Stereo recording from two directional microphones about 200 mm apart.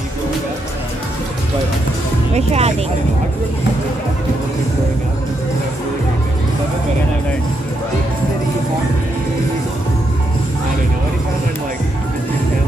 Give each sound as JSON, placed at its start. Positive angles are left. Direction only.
{"t": 2.3, "sound": "speech", "side_deg": -30}